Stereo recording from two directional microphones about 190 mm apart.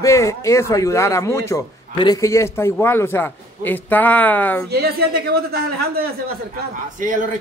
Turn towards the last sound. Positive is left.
turn(degrees=-45)  # may be behind; listen again after turning